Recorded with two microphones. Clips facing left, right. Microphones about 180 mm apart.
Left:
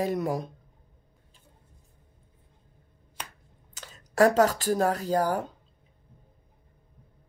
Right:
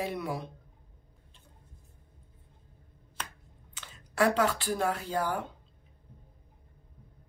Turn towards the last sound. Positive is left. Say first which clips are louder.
# left 6 dB
turn(degrees=40)  # may be behind; listen again after turning